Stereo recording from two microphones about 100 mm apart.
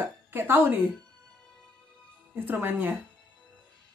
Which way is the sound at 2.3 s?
20° right (ahead or behind).